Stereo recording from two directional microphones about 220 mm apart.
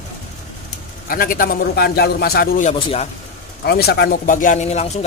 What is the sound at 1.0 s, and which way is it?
Speech, 40° left (ahead or behind).